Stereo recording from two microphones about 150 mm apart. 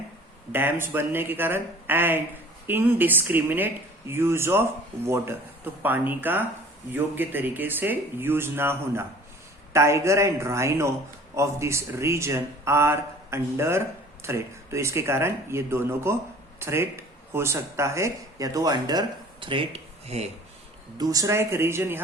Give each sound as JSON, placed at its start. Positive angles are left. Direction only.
{"t": 0.5, "sound": "speech", "side_deg": -15}
{"t": 21.0, "sound": "speech", "side_deg": -20}